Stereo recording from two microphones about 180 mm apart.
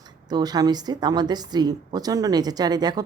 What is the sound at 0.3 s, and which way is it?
A woman's voice, 20° right (ahead or behind).